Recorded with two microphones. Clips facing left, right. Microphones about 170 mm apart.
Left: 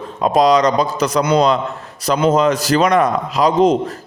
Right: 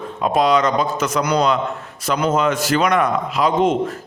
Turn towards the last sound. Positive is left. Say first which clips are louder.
# left 4 dB
turn(degrees=40)  # may be behind; listen again after turning